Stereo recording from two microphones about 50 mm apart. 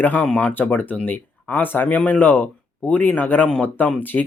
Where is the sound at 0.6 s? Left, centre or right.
Left.